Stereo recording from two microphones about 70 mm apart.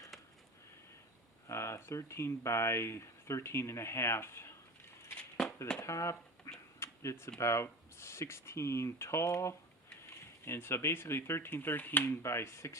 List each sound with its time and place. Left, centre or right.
1.5 s speech: left
5.8 s speech: left
6.7 s a sound: left
7.3 s speech: left
12.2 s speech: left